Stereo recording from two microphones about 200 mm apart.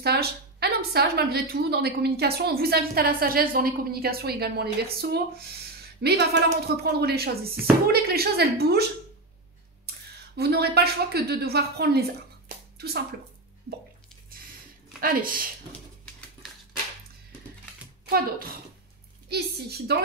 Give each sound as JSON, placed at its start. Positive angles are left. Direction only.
{"t": 0.0, "sound": "a woman's voice", "side_deg": -55}
{"t": 5.9, "sound": "a woman's voice", "side_deg": -55}
{"t": 9.8, "sound": "speech", "side_deg": -55}
{"t": 12.4, "sound": "a sound", "side_deg": -50}
{"t": 15.0, "sound": "a woman's voice", "side_deg": -45}
{"t": 18.0, "sound": "a woman's voice", "side_deg": -50}